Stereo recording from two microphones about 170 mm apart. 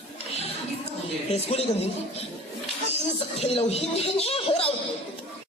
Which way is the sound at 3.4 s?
35° left (ahead or behind).